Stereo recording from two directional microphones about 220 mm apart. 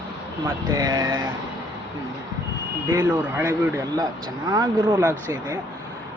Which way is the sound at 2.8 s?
10° right (ahead or behind).